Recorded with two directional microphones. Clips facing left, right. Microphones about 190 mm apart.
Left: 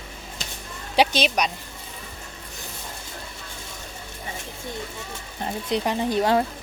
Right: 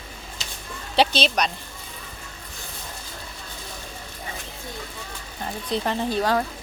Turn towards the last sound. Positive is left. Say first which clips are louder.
# left 2 dB
turn(degrees=20)  # may be behind; listen again after turning